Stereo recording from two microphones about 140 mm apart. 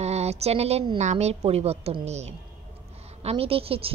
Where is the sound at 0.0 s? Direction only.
50° right (ahead or behind).